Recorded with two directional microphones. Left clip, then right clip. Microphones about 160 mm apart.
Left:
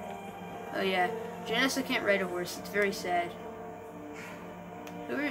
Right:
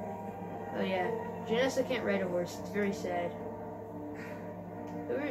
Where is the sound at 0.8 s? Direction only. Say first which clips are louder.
Left 4 dB; 90° left.